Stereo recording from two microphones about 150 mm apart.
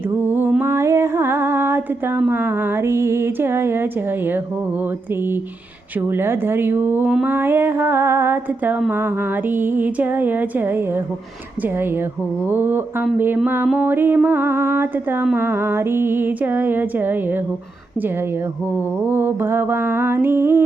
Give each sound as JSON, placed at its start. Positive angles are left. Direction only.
{"t": 0.3, "sound": "music", "side_deg": -10}
{"t": 6.0, "sound": "music", "side_deg": -15}
{"t": 12.5, "sound": "music", "side_deg": -15}
{"t": 19.0, "sound": "music", "side_deg": -15}